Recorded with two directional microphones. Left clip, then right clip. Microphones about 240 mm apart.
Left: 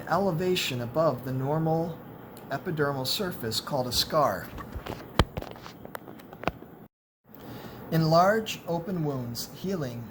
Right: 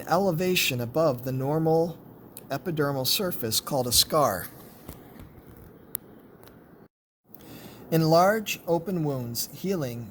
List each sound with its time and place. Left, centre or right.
0.0 s speech: right
7.9 s speech: right